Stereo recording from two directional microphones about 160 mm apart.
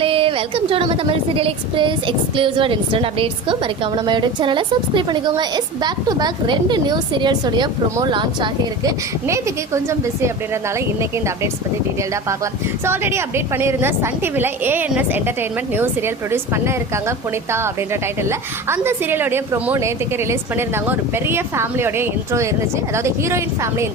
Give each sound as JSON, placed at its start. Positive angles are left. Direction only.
{"t": 0.0, "sound": "a woman's voice", "side_deg": -35}
{"t": 12.8, "sound": "a woman's voice", "side_deg": -15}